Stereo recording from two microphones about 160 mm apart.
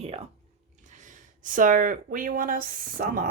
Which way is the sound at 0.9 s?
50° right (ahead or behind).